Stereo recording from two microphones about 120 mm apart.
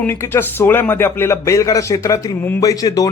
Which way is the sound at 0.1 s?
20° left (ahead or behind).